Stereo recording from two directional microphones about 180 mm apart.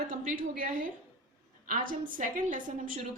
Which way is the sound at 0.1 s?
50° right (ahead or behind).